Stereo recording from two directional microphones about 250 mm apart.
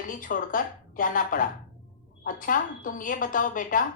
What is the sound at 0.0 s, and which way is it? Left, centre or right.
A woman's voice, left.